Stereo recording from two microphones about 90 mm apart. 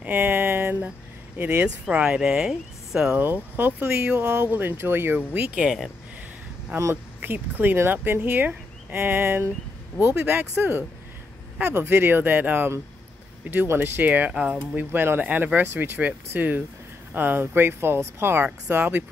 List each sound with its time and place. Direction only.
0.0 s a sound: 20° right (ahead or behind)
1.4 s speech: 15° right (ahead or behind)
3.5 s speech: 25° right (ahead or behind); by 5.9 s 10° right (ahead or behind)
7.2 s speech: 20° right (ahead or behind)